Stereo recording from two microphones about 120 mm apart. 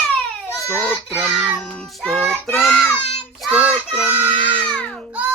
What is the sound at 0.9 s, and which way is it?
Speech, 10° right (ahead or behind).